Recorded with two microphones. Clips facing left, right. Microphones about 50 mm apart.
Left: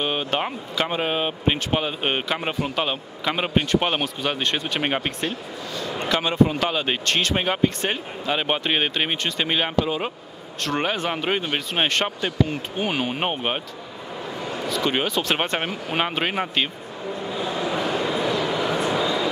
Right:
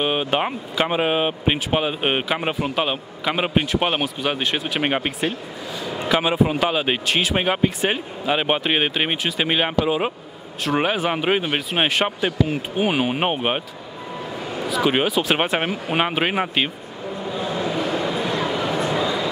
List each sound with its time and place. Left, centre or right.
0.0 s speech: centre
17.5 s vehicle: centre
18.2 s bow-wow: right